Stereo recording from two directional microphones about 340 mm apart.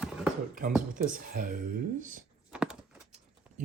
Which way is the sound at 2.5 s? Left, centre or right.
Centre.